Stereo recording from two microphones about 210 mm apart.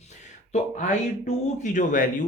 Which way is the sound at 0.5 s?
35° left (ahead or behind).